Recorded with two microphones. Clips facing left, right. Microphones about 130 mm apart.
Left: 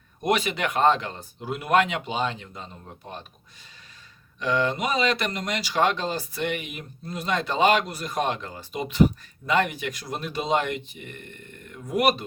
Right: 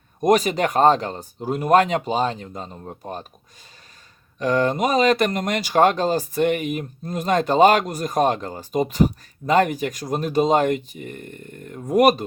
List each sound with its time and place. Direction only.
0.2 s speech: 40° right (ahead or behind)
4.4 s speech: 45° right (ahead or behind)